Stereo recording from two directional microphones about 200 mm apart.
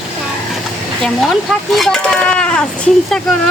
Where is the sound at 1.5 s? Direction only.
Centre (ahead or behind).